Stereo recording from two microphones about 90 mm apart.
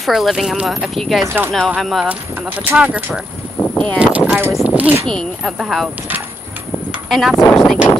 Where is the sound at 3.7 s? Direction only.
15° left (ahead or behind).